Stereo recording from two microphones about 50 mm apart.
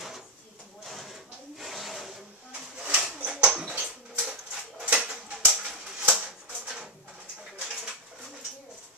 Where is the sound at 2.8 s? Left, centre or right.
Right.